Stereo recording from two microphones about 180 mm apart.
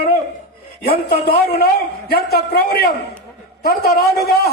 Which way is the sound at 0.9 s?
55° left (ahead or behind).